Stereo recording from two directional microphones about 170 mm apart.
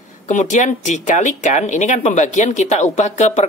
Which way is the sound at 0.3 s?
45° left (ahead or behind).